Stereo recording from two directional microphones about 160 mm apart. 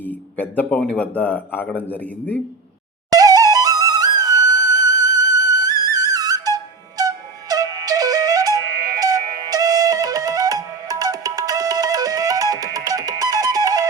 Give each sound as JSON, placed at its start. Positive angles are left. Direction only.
{"t": 0.3, "sound": "a man's voice", "side_deg": 10}
{"t": 3.1, "sound": "flute", "side_deg": -25}